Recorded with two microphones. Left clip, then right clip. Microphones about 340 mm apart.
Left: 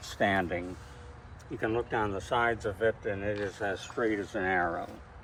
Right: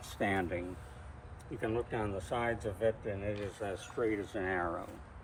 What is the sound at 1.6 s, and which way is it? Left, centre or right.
Speech, left.